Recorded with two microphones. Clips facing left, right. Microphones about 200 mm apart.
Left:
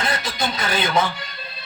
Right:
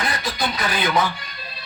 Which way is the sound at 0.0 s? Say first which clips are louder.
Even; 25° left (ahead or behind).